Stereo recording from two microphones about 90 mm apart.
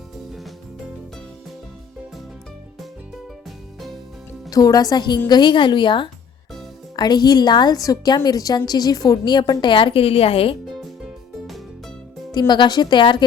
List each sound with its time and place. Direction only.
4.4 s a woman's voice: 45° left (ahead or behind); by 6.1 s 65° left (ahead or behind)
6.9 s a woman's voice: 50° left (ahead or behind); by 10.6 s 90° left
12.3 s speech: 55° left (ahead or behind)